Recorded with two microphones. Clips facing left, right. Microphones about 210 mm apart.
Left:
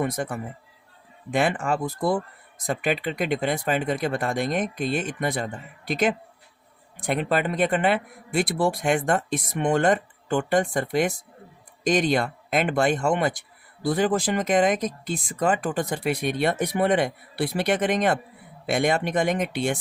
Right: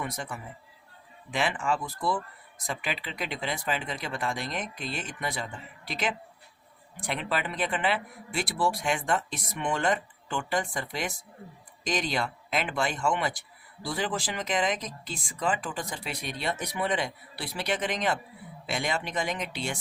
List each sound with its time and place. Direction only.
0.0 s speech: 50° left (ahead or behind)